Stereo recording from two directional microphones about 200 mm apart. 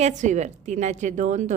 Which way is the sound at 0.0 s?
35° right (ahead or behind).